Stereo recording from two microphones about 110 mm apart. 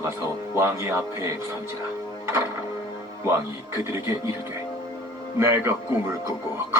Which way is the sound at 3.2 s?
25° right (ahead or behind).